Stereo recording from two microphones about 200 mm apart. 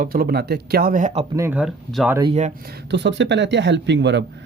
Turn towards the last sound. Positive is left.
turn(degrees=-60)  # may be behind; listen again after turning